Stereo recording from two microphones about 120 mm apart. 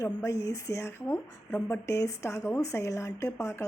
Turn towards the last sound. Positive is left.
turn(degrees=25)  # may be behind; listen again after turning